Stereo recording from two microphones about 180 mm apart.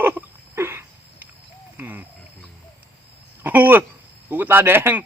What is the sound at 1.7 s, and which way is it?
Speech, 10° right (ahead or behind).